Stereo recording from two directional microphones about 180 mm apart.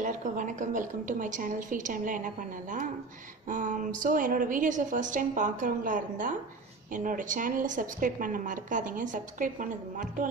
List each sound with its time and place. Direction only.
0.0 s a woman's voice: 45° right (ahead or behind)